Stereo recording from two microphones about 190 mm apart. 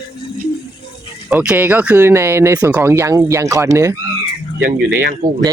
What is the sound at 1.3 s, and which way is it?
Speech, 5° right (ahead or behind).